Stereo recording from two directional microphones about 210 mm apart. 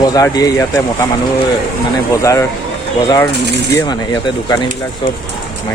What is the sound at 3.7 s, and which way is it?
Speech, 15° left (ahead or behind).